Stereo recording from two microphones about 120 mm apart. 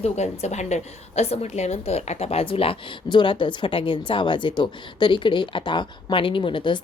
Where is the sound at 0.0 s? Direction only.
65° left (ahead or behind).